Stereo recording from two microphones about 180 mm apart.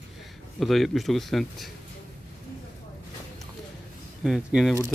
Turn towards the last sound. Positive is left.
turn(degrees=-5)  # may be behind; listen again after turning